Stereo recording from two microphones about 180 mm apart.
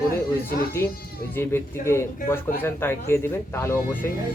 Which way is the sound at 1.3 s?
10° left (ahead or behind).